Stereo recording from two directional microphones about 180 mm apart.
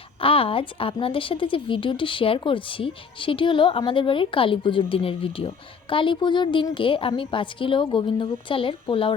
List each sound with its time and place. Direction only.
0.2 s speech: 30° left (ahead or behind)